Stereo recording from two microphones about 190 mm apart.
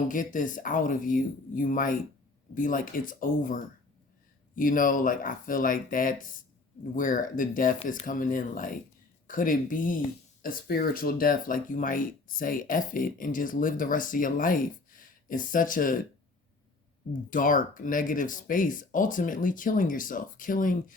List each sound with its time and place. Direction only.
0.1 s speech: 45° left (ahead or behind)
17.2 s speech: 45° left (ahead or behind)